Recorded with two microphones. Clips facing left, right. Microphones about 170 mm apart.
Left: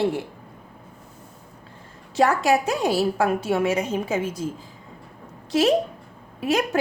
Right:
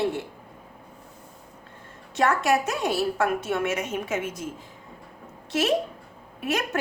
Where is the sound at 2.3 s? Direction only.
35° left (ahead or behind).